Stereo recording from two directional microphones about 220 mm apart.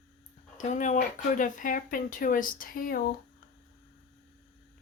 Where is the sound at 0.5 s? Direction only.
35° left (ahead or behind).